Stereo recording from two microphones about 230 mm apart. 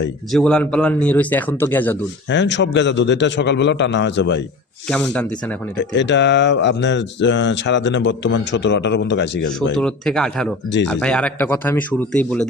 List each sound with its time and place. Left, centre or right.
0.3 s speech: centre
2.3 s speech: left
4.9 s speech: centre
5.9 s speech: left
9.7 s speech: centre